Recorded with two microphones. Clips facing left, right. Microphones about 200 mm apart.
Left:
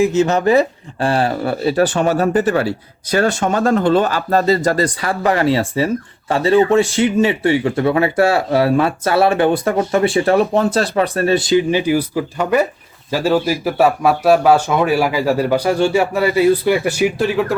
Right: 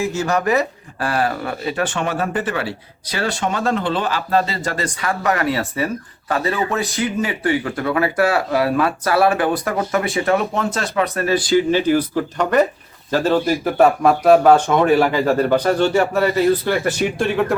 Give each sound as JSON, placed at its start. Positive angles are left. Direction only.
{"t": 0.0, "sound": "speech", "side_deg": 20}